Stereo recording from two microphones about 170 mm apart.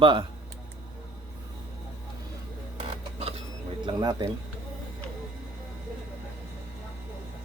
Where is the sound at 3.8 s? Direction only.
25° right (ahead or behind).